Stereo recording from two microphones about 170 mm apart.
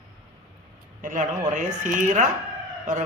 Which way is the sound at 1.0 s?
50° right (ahead or behind).